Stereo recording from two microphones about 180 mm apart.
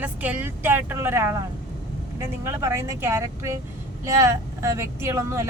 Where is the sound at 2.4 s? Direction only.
15° right (ahead or behind).